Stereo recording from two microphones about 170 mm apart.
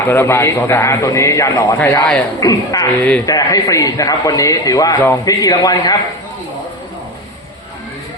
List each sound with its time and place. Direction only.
0.0 s a man's voice: 15° left (ahead or behind)